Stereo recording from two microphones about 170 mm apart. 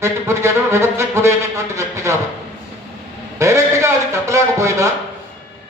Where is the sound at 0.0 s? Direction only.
15° right (ahead or behind).